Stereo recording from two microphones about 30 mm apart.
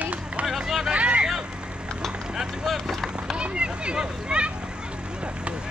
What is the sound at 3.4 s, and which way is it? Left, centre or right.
Speech, right.